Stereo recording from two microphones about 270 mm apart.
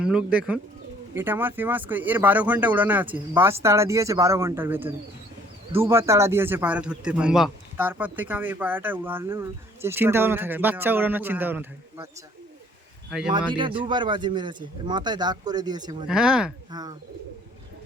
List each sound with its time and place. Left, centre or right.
0.0 s a man's voice: centre
13.1 s speech: centre
13.5 s a man's voice: centre
16.0 s speech: centre
16.7 s a man's voice: centre